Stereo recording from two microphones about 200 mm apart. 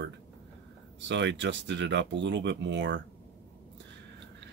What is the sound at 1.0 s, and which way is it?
Speech, 65° right (ahead or behind).